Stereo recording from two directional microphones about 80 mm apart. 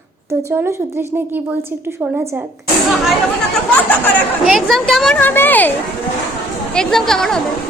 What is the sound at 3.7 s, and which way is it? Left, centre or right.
Speech, centre.